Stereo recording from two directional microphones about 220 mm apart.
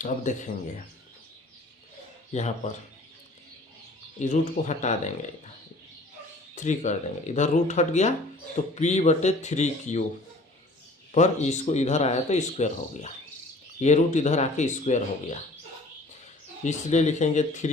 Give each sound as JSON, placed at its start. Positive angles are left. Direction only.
{"t": 0.0, "sound": "speech", "side_deg": 35}
{"t": 2.3, "sound": "speech", "side_deg": 30}
{"t": 4.2, "sound": "speech", "side_deg": 35}
{"t": 6.6, "sound": "speech", "side_deg": 35}
{"t": 11.1, "sound": "speech", "side_deg": 30}
{"t": 16.6, "sound": "speech", "side_deg": 30}